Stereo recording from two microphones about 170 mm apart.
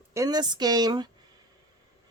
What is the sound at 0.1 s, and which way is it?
Speech, 20° right (ahead or behind).